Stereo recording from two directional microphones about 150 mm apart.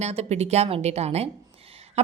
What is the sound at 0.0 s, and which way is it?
A woman's voice, 45° right (ahead or behind).